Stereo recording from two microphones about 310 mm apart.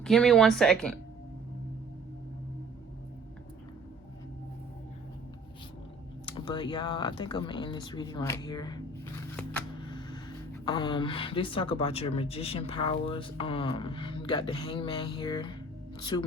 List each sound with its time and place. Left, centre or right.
0.0 s speech: centre
6.2 s speech: centre